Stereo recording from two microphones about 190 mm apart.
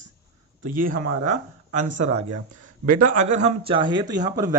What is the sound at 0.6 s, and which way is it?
Speech, 45° right (ahead or behind).